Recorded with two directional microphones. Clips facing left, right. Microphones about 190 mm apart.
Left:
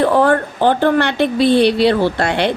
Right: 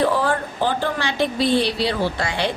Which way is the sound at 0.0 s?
60° left (ahead or behind).